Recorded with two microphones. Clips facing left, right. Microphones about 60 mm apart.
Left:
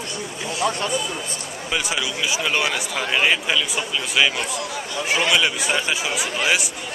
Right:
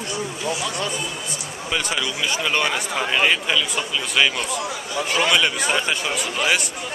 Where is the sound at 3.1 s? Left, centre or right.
Centre.